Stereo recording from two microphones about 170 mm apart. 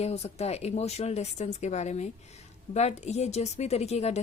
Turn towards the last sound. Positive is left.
turn(degrees=40)  # may be behind; listen again after turning